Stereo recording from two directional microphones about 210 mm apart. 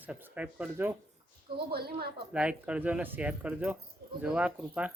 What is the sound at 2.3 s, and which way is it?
Speech, 5° right (ahead or behind).